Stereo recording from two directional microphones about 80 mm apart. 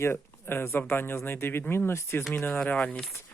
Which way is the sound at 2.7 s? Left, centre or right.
Centre.